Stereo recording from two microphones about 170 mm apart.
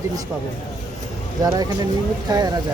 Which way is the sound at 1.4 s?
20° right (ahead or behind).